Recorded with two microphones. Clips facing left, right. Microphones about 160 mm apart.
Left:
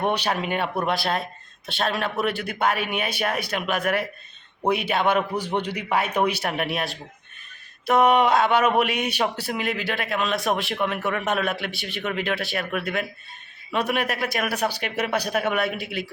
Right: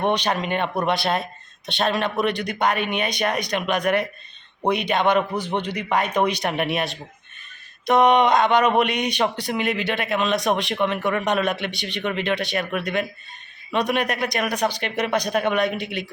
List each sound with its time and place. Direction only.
0.1 s a man's voice: 10° left (ahead or behind)